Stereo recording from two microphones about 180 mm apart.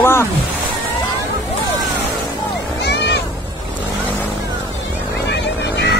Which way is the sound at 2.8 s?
70° left (ahead or behind).